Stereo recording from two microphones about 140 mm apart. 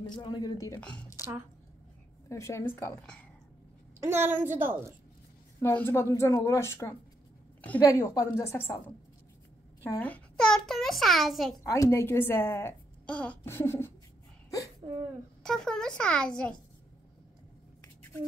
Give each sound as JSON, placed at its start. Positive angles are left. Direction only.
{"t": 0.2, "sound": "speech", "side_deg": 35}
{"t": 0.7, "sound": "a woman's voice", "side_deg": 10}
{"t": 2.2, "sound": "a woman's voice", "side_deg": 20}
{"t": 4.0, "sound": "a woman's voice", "side_deg": -15}
{"t": 5.6, "sound": "a woman's voice", "side_deg": 15}
{"t": 11.6, "sound": "a woman's voice", "side_deg": 20}
{"t": 15.4, "sound": "a child's voice", "side_deg": 5}